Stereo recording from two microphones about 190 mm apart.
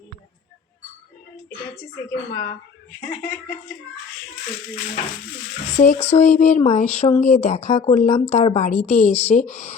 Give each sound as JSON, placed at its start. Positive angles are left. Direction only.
{"t": 1.7, "sound": "speech", "side_deg": 15}
{"t": 5.7, "sound": "speech", "side_deg": 40}